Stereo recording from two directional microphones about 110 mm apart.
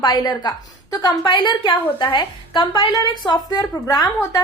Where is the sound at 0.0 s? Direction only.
40° left (ahead or behind).